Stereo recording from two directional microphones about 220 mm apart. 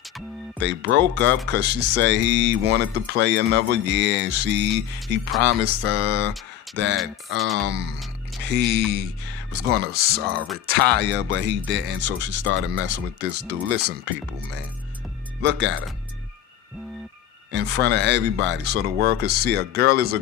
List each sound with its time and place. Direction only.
0.6 s speech: 55° right (ahead or behind)
7.3 s speech: centre (ahead or behind)
7.6 s speech: 50° right (ahead or behind)
15.4 s speech: 55° right (ahead or behind)
17.5 s speech: 50° right (ahead or behind)